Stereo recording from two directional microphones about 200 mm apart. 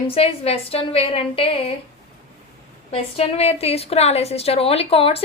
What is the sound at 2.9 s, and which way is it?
A woman's voice, 30° left (ahead or behind).